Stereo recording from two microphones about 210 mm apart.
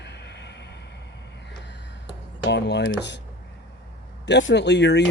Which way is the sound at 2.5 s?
55° left (ahead or behind).